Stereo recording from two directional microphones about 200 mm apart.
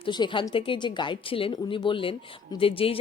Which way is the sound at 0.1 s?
25° left (ahead or behind).